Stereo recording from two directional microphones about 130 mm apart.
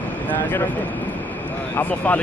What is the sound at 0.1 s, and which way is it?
Speech, 15° left (ahead or behind).